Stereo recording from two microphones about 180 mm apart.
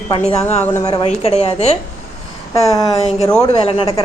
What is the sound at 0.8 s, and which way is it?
Speech, 35° left (ahead or behind).